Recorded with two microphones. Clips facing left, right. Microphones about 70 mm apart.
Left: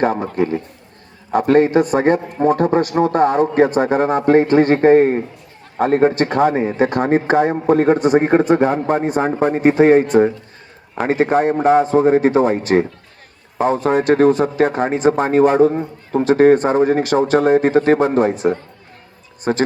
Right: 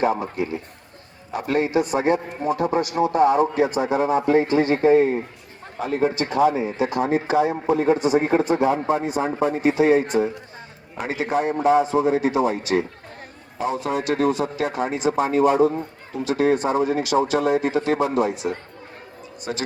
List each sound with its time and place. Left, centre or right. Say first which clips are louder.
1.3 s a man's voice: left 9 dB; left